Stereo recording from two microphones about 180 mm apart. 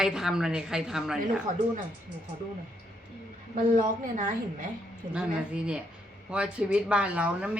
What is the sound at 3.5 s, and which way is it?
Speech, 45° right (ahead or behind).